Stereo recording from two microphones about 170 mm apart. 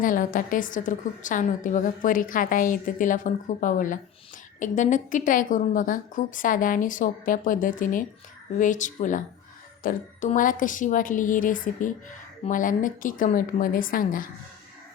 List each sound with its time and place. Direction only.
0.0 s a woman's voice: 55° left (ahead or behind)